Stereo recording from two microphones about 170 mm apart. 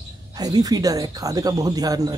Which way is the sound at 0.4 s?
20° right (ahead or behind).